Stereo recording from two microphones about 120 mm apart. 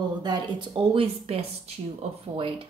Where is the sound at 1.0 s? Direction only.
55° right (ahead or behind).